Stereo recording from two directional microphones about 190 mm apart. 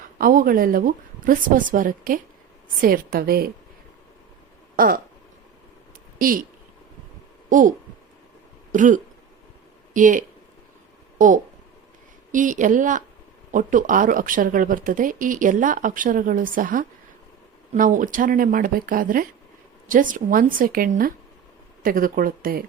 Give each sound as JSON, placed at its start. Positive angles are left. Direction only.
{"t": 0.2, "sound": "speech", "side_deg": -50}
{"t": 4.8, "sound": "speech", "side_deg": -50}
{"t": 6.1, "sound": "speech", "side_deg": -45}
{"t": 8.7, "sound": "speech", "side_deg": -45}
{"t": 12.3, "sound": "speech", "side_deg": -40}